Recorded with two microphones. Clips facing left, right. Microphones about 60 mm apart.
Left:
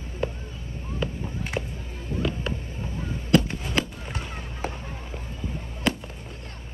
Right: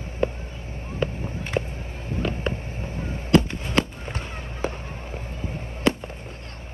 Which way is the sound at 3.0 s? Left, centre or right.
Centre.